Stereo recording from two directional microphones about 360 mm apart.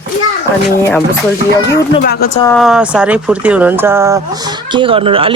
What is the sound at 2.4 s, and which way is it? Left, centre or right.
Speech, centre.